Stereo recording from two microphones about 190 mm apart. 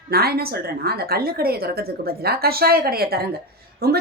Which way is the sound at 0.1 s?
55° right (ahead or behind).